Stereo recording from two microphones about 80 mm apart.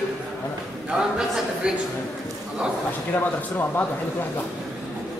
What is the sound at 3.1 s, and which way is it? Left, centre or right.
Speech, left.